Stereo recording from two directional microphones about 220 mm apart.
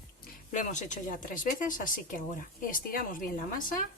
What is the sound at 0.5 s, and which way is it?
Speech, 35° left (ahead or behind).